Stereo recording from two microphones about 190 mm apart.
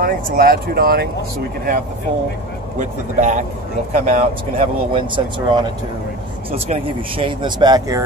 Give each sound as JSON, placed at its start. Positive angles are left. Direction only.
{"t": 0.0, "sound": "speech", "side_deg": -50}
{"t": 2.8, "sound": "speech", "side_deg": -40}
{"t": 4.6, "sound": "speech", "side_deg": -25}